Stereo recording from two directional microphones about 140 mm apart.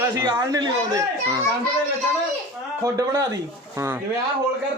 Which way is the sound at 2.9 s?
25° right (ahead or behind).